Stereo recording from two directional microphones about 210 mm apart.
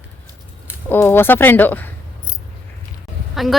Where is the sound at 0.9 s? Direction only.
10° left (ahead or behind).